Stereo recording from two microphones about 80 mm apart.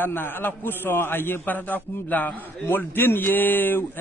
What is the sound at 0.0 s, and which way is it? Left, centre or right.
A man's voice, left.